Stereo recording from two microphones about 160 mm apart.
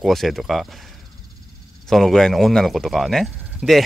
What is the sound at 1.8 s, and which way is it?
Speech, 5° left (ahead or behind).